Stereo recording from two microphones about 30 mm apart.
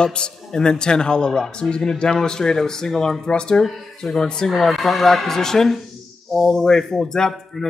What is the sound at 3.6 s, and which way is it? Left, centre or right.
Speech, centre.